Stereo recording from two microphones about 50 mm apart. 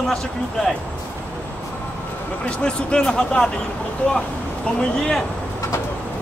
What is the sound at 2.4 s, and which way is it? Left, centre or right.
Speech, left.